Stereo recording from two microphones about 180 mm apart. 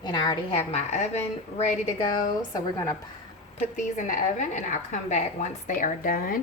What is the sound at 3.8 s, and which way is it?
A woman's voice, 45° left (ahead or behind).